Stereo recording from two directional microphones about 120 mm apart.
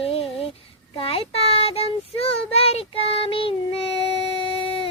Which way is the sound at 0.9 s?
50° left (ahead or behind).